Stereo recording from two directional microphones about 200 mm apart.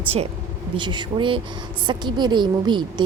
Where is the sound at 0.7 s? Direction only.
25° right (ahead or behind).